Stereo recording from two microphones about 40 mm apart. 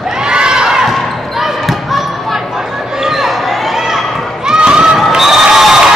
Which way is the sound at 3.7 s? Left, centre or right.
Centre.